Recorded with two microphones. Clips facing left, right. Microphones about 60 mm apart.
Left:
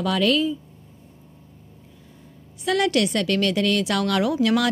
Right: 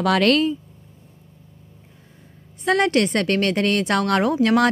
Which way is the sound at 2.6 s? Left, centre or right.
Right.